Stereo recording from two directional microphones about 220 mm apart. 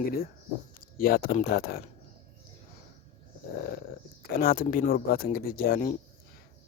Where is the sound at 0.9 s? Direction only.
40° left (ahead or behind).